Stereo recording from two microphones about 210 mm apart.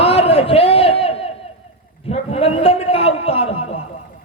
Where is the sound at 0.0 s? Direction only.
30° left (ahead or behind).